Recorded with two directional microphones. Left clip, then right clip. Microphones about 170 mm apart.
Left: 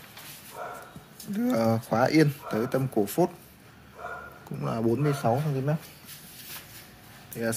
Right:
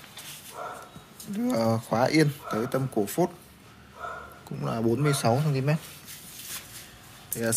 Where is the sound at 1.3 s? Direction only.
15° left (ahead or behind).